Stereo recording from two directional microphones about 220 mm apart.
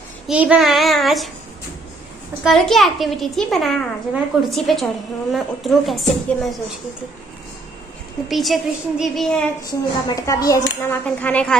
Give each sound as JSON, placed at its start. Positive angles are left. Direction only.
{"t": 0.3, "sound": "a child's voice", "side_deg": -5}
{"t": 2.4, "sound": "a child's voice", "side_deg": 0}
{"t": 8.3, "sound": "a child's voice", "side_deg": 0}
{"t": 10.0, "sound": "speech", "side_deg": 15}